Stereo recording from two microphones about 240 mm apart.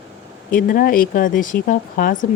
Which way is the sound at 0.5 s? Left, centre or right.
Left.